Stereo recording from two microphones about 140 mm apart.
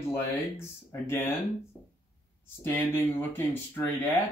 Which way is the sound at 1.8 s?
20° right (ahead or behind).